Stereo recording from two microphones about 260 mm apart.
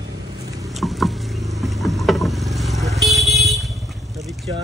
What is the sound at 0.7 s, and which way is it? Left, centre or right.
Boat, centre.